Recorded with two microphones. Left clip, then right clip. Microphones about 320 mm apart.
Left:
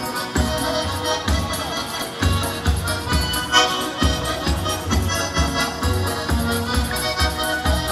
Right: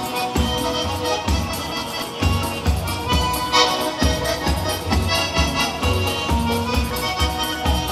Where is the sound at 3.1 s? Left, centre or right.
Centre.